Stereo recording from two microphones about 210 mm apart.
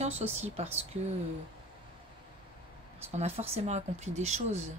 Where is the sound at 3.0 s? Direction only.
30° right (ahead or behind).